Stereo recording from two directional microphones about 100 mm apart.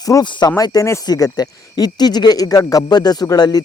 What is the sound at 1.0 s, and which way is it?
Speech, 40° left (ahead or behind).